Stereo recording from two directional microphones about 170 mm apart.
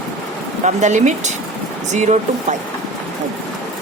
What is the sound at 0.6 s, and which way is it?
Speech, 45° right (ahead or behind).